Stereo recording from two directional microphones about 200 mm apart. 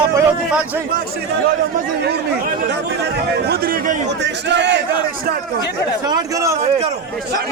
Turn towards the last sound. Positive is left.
turn(degrees=-15)  # may be behind; listen again after turning